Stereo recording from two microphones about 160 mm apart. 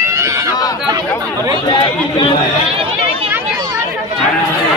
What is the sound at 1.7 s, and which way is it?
Speech, 30° left (ahead or behind).